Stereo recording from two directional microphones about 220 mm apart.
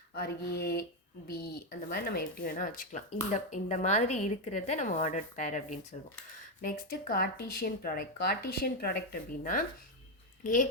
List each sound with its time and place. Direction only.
0.1 s speech: 45° left (ahead or behind)